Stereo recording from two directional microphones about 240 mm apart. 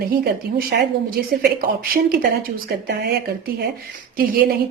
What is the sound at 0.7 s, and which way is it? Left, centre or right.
A woman's voice, right.